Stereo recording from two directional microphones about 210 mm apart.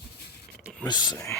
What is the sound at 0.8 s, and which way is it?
Speech, 20° left (ahead or behind).